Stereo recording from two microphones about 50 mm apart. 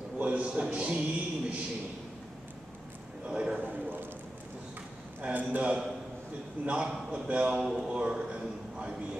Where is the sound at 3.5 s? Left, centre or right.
Right.